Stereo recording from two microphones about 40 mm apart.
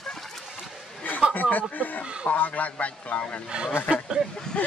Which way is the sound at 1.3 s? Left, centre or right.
Left.